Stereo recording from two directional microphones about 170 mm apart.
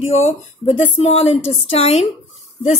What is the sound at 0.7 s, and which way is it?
A woman's voice, 35° left (ahead or behind).